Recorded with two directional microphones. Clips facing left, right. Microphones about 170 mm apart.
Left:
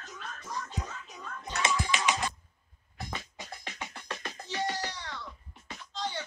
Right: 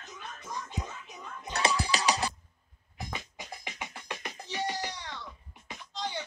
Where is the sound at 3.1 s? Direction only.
15° right (ahead or behind).